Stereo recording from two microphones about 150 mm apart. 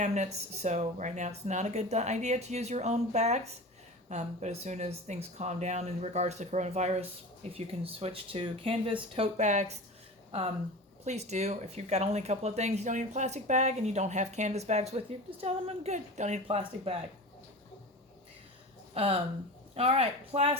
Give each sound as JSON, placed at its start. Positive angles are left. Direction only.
{"t": 0.0, "sound": "speech", "side_deg": -50}
{"t": 11.0, "sound": "speech", "side_deg": -50}
{"t": 18.9, "sound": "speech", "side_deg": -40}